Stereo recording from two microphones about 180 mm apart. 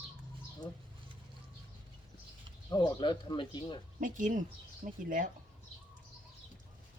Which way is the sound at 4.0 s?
45° right (ahead or behind).